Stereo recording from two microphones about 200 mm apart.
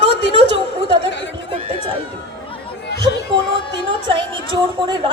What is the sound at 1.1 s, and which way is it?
Speech, 65° left (ahead or behind).